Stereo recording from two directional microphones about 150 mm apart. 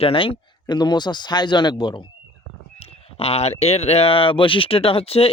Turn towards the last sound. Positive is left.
turn(degrees=40)  # may be behind; listen again after turning